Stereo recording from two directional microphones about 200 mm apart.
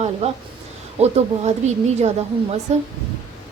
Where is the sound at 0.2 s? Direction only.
30° right (ahead or behind).